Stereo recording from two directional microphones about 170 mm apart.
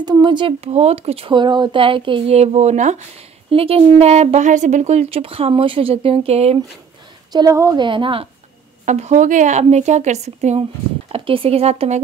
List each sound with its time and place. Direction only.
0.0 s speech: 25° right (ahead or behind)
7.3 s a woman's voice: 20° right (ahead or behind)
8.8 s speech: 45° right (ahead or behind)